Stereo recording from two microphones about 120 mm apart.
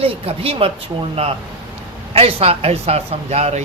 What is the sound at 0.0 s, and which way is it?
Speech, 50° right (ahead or behind).